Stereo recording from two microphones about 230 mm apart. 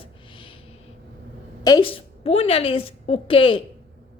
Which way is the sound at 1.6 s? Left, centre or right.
Centre.